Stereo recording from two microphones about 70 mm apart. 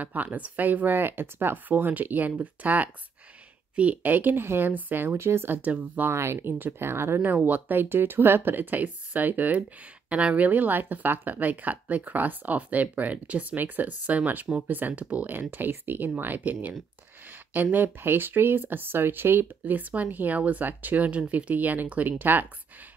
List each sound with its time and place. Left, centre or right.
0.0 s speech: right
5.6 s speech: right
6.0 s speech: right